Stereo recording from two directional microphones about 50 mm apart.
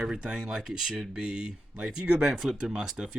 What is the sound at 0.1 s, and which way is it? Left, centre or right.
Speech, centre.